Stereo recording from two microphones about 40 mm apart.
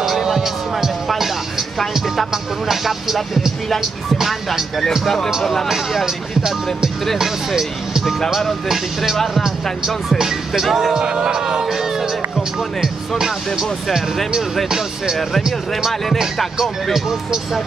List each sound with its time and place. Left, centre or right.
0.2 s music: centre
2.0 s speech: centre
5.0 s speech: centre
5.7 s speech: centre
9.1 s speech: centre
9.4 s speech: centre
11.6 s music: centre
16.9 s speech: centre